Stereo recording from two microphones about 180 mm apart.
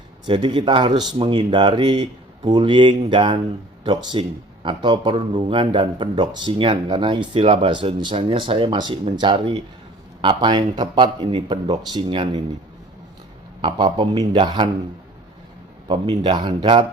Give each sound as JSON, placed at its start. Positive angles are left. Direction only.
{"t": 0.3, "sound": "speech", "side_deg": -25}
{"t": 13.6, "sound": "speech", "side_deg": -25}
{"t": 15.9, "sound": "speech", "side_deg": -25}